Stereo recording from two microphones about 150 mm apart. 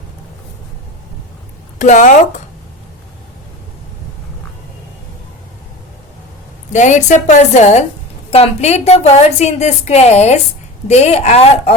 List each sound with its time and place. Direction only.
1.8 s speech: 55° left (ahead or behind)
6.7 s a woman's voice: 55° left (ahead or behind)